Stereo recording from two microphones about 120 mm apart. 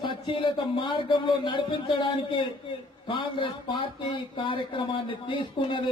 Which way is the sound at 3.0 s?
45° left (ahead or behind).